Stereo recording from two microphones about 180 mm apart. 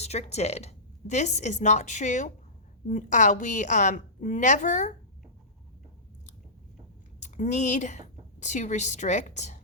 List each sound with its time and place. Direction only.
0.0 s a woman's voice: 35° left (ahead or behind)
7.2 s a woman's voice: 40° left (ahead or behind)